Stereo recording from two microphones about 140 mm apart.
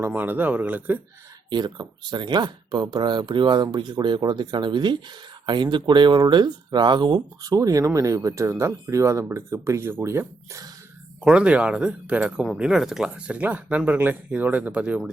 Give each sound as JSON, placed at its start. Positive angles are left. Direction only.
{"t": 0.0, "sound": "speech", "side_deg": -15}
{"t": 1.5, "sound": "speech", "side_deg": -30}
{"t": 11.2, "sound": "speech", "side_deg": -5}